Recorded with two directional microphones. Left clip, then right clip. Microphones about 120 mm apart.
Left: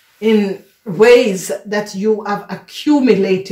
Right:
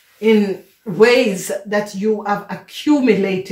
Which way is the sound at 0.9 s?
35° left (ahead or behind).